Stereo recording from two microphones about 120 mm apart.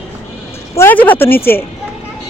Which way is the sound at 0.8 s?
15° left (ahead or behind).